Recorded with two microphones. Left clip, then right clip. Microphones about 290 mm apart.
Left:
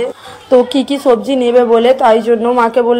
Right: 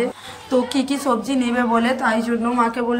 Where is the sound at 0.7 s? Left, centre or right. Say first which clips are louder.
Left 9 dB; centre.